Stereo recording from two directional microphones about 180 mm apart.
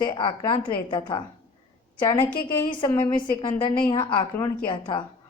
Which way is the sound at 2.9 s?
25° left (ahead or behind).